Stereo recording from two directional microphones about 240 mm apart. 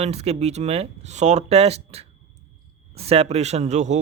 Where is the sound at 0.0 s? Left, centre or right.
Right.